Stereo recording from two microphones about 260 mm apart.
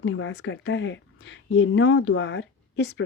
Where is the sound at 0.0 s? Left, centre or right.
Left.